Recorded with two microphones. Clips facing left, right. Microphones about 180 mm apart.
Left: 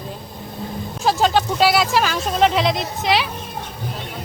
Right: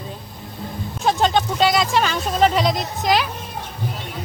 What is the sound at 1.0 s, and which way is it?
Speech, centre (ahead or behind).